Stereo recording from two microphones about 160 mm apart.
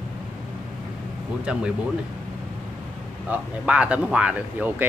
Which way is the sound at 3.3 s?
5° right (ahead or behind).